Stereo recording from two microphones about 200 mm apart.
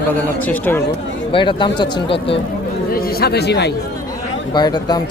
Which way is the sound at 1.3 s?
25° left (ahead or behind).